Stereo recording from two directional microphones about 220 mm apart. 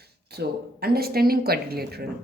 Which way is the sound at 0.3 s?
45° right (ahead or behind).